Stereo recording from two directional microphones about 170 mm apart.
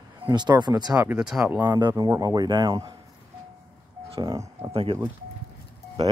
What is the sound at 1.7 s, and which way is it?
Speech, 25° right (ahead or behind).